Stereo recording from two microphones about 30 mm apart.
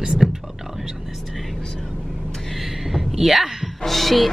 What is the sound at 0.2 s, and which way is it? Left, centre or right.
Speech, centre.